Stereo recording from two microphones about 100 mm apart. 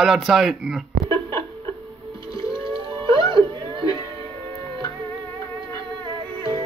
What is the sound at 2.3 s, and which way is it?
Music, 60° right (ahead or behind).